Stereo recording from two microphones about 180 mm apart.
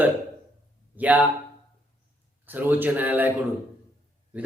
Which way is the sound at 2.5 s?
10° right (ahead or behind).